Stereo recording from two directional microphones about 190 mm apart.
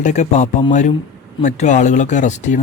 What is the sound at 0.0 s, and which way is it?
Speech, 40° left (ahead or behind).